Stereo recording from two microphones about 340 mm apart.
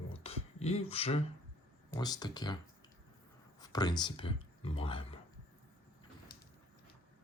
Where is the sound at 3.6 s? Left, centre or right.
Centre.